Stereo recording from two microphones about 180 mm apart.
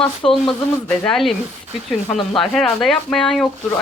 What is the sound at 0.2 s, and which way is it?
Speech, 30° left (ahead or behind).